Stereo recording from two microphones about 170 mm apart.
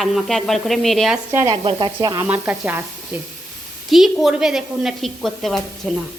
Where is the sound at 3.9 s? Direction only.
Centre (ahead or behind).